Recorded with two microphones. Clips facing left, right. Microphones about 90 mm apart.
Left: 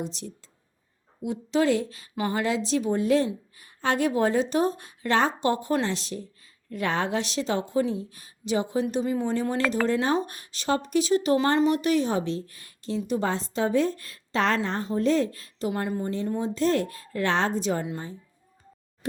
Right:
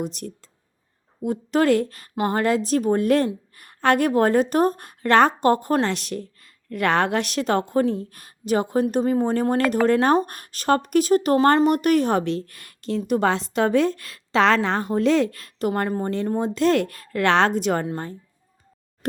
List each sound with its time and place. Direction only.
0.0 s a woman's voice: 55° right (ahead or behind)